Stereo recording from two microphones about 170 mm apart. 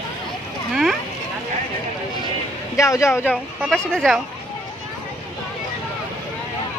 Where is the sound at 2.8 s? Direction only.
20° left (ahead or behind); by 4.2 s centre (ahead or behind).